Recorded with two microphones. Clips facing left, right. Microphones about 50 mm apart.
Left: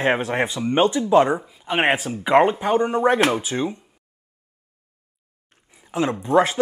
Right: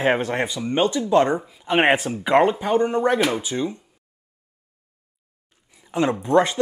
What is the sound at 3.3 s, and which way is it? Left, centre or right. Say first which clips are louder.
Speech: left 1 dB; left.